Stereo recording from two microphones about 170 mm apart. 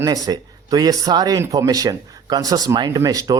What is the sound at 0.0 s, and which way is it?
Speech, 20° right (ahead or behind).